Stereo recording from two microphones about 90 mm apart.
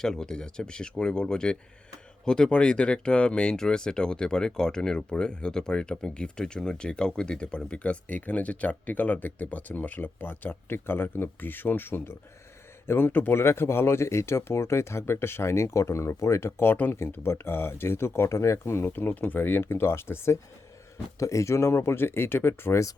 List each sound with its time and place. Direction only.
0.0 s speech: 5° left (ahead or behind); by 23.0 s 35° left (ahead or behind)